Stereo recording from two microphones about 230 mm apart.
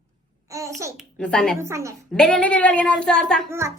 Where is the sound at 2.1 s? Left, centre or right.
Centre.